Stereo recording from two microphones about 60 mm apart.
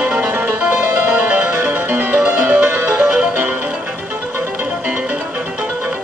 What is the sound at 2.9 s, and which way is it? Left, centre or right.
Music, centre.